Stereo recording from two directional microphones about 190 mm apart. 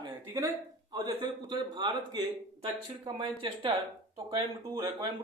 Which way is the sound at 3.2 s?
25° right (ahead or behind).